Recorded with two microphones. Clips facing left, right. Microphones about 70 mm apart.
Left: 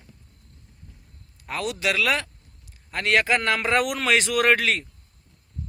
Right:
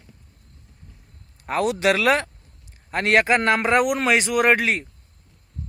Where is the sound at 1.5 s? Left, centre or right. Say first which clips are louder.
Right 6 dB; right.